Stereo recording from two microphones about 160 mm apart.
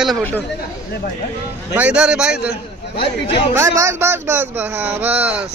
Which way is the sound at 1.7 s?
10° right (ahead or behind).